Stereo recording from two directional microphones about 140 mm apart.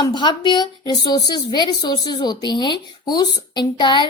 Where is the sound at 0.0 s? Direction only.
35° left (ahead or behind).